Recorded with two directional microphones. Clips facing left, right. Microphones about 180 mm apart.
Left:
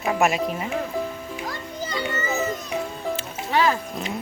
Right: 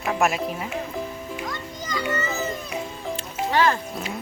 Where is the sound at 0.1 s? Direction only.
Centre (ahead or behind).